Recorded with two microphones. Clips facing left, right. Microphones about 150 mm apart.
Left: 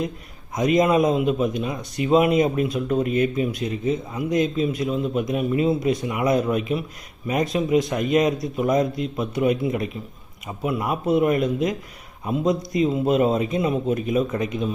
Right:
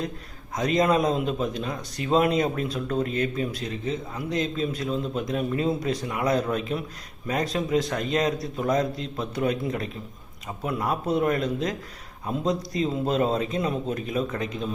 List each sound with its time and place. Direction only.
0.5 s a man's voice: 10° left (ahead or behind)
3.5 s speech: 35° right (ahead or behind)
4.4 s a man's voice: 10° left (ahead or behind)